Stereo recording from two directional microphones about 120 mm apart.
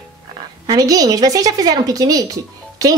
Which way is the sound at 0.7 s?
30° right (ahead or behind).